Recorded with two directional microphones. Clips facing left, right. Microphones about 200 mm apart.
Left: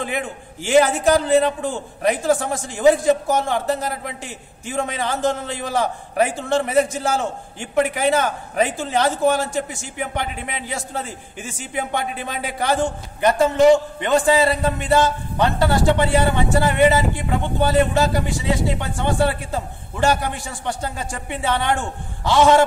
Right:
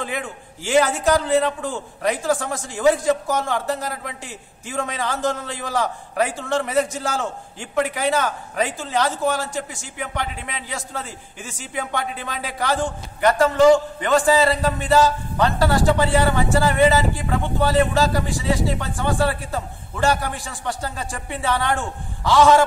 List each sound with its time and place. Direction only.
0.0 s speech: 20° left (ahead or behind)
10.7 s speech: 25° left (ahead or behind)